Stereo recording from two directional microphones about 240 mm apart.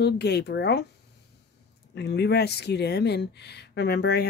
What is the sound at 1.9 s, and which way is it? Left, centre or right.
Speech, left.